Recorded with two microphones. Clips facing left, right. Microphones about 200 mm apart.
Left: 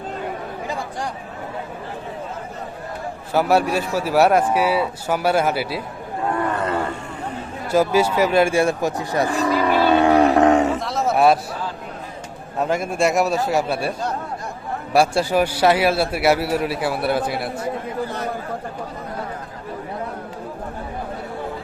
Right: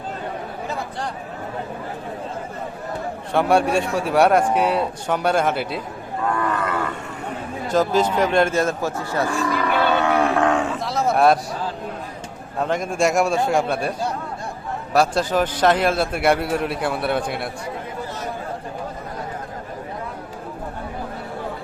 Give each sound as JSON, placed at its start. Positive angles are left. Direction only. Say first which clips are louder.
{"t": 3.3, "sound": "a man's voice", "louder": "even", "side_deg": 5}
{"t": 6.5, "sound": "wild animals", "louder": "left 1 dB", "side_deg": 30}
{"t": 7.7, "sound": "a man's voice", "louder": "left 1 dB", "side_deg": 10}
{"t": 9.7, "sound": "roaring cats", "louder": "left 4 dB", "side_deg": 35}
{"t": 10.8, "sound": "a sound", "louder": "even", "side_deg": 0}
{"t": 12.6, "sound": "a man's voice", "louder": "left 1 dB", "side_deg": 10}
{"t": 14.9, "sound": "a man's voice", "louder": "left 1 dB", "side_deg": 10}